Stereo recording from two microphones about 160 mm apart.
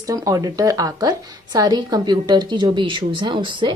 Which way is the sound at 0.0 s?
20° right (ahead or behind).